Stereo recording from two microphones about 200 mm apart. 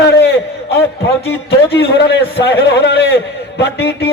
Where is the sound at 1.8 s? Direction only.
60° left (ahead or behind).